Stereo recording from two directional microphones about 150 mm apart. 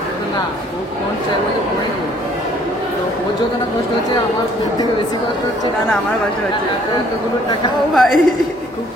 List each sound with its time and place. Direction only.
7.9 s a woman's voice: centre (ahead or behind)